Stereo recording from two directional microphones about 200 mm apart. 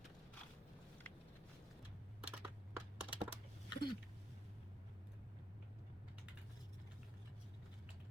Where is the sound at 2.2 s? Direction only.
5° right (ahead or behind).